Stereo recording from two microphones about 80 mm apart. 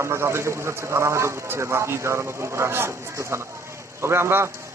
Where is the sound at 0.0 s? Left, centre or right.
Right.